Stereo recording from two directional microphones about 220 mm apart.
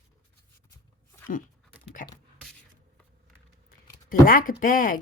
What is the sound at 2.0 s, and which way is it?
Beatboxing, 40° left (ahead or behind).